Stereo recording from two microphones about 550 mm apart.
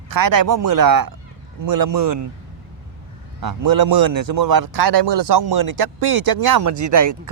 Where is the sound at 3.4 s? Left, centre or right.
Right.